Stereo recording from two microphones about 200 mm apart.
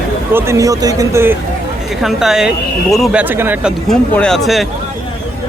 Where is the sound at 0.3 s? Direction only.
15° right (ahead or behind).